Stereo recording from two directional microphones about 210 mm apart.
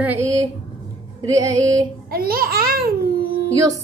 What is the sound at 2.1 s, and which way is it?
Speech, 45° right (ahead or behind).